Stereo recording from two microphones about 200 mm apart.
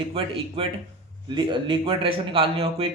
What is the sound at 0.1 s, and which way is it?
Speech, 25° right (ahead or behind).